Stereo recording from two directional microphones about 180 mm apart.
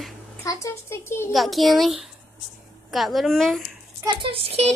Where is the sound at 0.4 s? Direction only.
15° left (ahead or behind).